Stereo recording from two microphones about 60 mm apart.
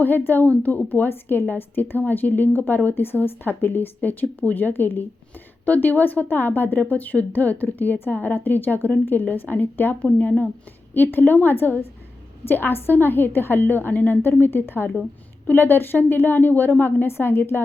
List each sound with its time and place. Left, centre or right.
0.0 s a woman's voice: left